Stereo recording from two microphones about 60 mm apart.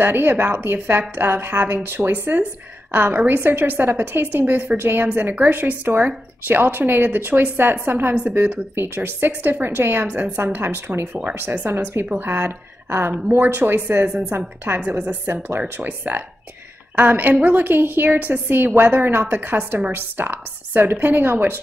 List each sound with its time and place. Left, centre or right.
0.0 s a woman's voice: right
12.1 s a woman's voice: right
14.9 s a woman's voice: right